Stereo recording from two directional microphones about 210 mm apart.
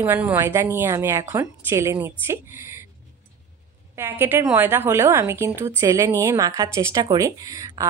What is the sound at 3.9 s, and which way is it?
A woman's voice, 10° right (ahead or behind).